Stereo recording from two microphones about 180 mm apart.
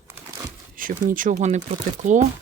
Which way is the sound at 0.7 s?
50° right (ahead or behind).